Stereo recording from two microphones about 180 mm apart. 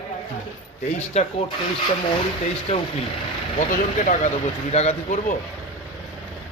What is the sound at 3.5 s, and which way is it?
Speech, 40° left (ahead or behind).